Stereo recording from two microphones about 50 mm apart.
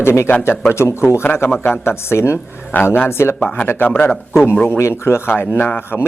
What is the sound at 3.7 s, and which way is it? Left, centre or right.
Speech, left.